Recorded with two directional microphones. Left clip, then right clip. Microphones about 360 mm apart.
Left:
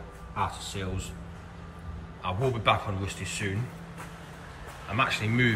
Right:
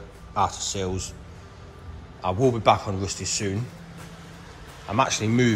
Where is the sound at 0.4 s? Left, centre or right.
Centre.